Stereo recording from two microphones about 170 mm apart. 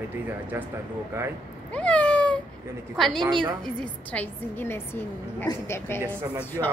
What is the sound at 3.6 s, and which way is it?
A woman's voice, 10° left (ahead or behind).